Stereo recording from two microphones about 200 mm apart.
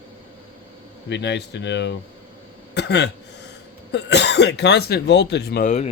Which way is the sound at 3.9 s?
60° left (ahead or behind).